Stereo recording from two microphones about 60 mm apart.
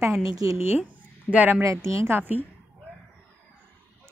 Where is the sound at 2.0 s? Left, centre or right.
Right.